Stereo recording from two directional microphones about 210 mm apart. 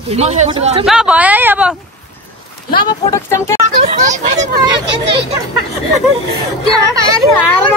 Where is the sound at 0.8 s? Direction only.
5° right (ahead or behind).